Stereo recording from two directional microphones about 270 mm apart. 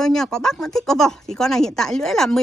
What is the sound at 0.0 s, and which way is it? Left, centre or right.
Speech, centre.